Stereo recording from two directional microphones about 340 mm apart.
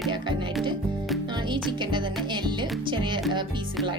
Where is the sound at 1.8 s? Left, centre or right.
Centre.